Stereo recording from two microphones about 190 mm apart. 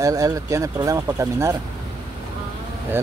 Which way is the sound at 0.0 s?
15° right (ahead or behind).